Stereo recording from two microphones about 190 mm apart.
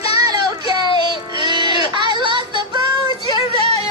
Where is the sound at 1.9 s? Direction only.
25° right (ahead or behind).